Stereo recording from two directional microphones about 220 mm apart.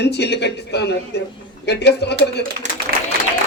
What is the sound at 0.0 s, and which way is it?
A woman's voice, 50° left (ahead or behind).